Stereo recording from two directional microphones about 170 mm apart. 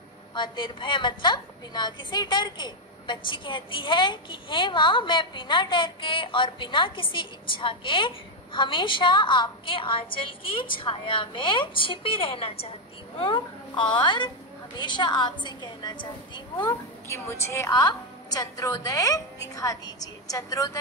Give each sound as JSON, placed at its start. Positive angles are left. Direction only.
{"t": 0.3, "sound": "a woman's voice", "side_deg": 30}
{"t": 17.1, "sound": "a woman's voice", "side_deg": 15}